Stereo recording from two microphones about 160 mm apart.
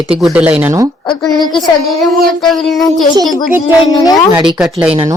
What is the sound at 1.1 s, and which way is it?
Speech, 25° left (ahead or behind).